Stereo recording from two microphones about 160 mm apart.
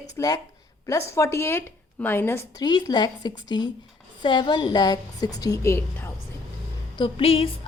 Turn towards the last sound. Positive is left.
turn(degrees=35)  # may be behind; listen again after turning